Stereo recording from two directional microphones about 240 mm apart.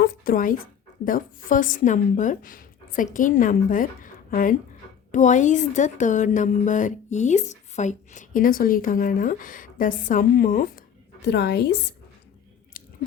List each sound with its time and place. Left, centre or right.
0.0 s a woman's voice: left